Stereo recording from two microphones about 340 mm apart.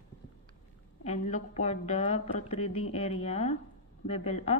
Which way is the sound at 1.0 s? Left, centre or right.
Left.